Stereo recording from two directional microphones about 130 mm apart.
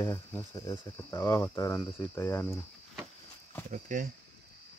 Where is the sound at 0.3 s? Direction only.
20° left (ahead or behind).